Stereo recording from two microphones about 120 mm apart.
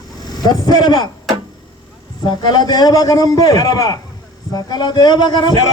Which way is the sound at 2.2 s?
35° left (ahead or behind).